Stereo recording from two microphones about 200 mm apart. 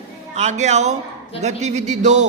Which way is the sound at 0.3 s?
35° right (ahead or behind).